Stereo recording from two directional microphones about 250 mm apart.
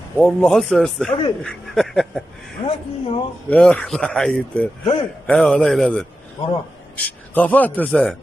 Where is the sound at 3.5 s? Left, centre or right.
Centre.